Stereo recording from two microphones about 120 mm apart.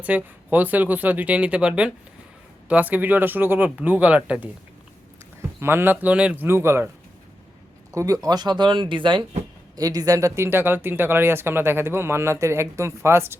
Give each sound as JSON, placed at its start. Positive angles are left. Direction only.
{"t": 0.0, "sound": "speech", "side_deg": -15}
{"t": 5.5, "sound": "speech", "side_deg": -20}
{"t": 7.9, "sound": "speech", "side_deg": -30}
{"t": 9.7, "sound": "speech", "side_deg": -30}